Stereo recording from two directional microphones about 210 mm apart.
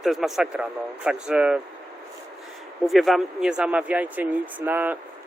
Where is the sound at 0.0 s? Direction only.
Centre (ahead or behind).